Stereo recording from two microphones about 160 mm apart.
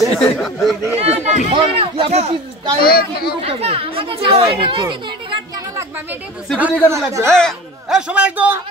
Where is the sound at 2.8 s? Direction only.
70° left (ahead or behind).